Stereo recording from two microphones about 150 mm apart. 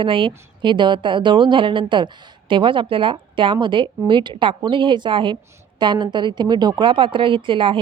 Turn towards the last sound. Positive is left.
turn(degrees=-35)  # may be behind; listen again after turning